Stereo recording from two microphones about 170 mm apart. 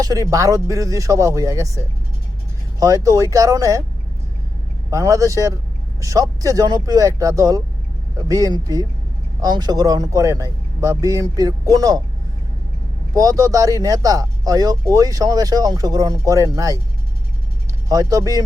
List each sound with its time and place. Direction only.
0.0 s speech: 20° right (ahead or behind)
2.8 s speech: 20° right (ahead or behind)
4.9 s speech: 20° right (ahead or behind)
13.1 s speech: 20° right (ahead or behind)
17.8 s speech: 20° right (ahead or behind)